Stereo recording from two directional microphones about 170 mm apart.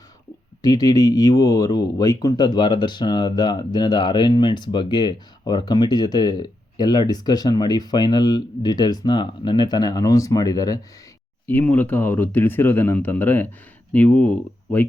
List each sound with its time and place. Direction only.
0.6 s speech: 20° left (ahead or behind)